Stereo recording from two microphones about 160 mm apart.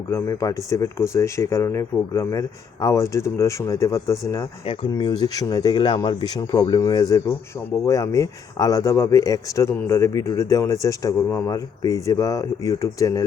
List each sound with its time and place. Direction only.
0.1 s speech: 20° left (ahead or behind)
4.6 s speech: 40° left (ahead or behind)
4.9 s speech: 25° left (ahead or behind)